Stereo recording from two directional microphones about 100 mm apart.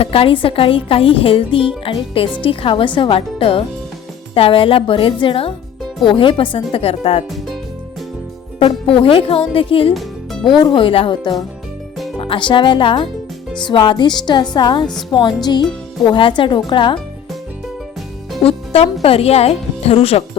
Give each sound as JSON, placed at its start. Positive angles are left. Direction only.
{"t": 0.0, "sound": "speech", "side_deg": 70}
{"t": 8.5, "sound": "speech", "side_deg": 65}
{"t": 10.4, "sound": "speech", "side_deg": 55}
{"t": 11.2, "sound": "speech", "side_deg": 45}
{"t": 12.2, "sound": "speech", "side_deg": 60}
{"t": 16.1, "sound": "speech", "side_deg": 55}
{"t": 18.4, "sound": "music", "side_deg": 90}
{"t": 19.0, "sound": "speech", "side_deg": 80}